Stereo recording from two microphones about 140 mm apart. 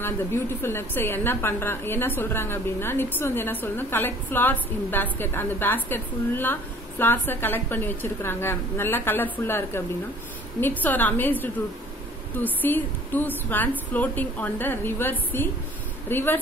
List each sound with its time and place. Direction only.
0.0 s a woman's voice: 15° left (ahead or behind)